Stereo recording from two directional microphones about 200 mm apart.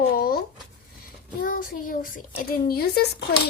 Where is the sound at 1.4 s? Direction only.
45° left (ahead or behind).